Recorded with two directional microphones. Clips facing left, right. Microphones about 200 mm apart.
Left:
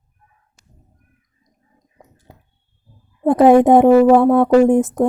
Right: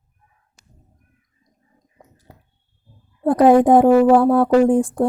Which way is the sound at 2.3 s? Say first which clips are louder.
Left 1 dB; 20° left (ahead or behind).